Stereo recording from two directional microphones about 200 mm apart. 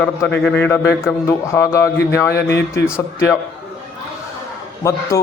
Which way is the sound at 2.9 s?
10° left (ahead or behind).